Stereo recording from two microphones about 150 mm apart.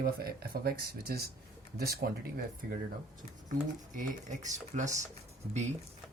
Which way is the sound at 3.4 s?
60° right (ahead or behind).